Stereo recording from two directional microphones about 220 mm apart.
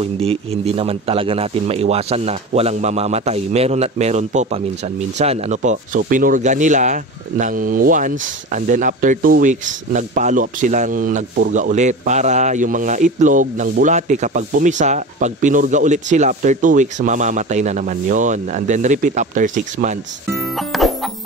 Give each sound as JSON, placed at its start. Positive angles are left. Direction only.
{"t": 0.0, "sound": "a man's voice", "side_deg": -25}
{"t": 20.2, "sound": "music", "side_deg": 0}